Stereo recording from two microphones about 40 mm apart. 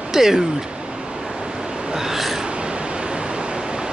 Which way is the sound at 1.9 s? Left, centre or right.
Centre.